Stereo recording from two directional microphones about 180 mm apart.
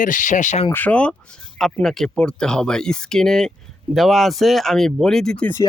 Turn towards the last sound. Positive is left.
turn(degrees=10)  # may be behind; listen again after turning